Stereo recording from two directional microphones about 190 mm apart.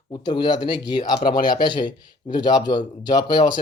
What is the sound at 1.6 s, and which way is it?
Speech, 25° left (ahead or behind).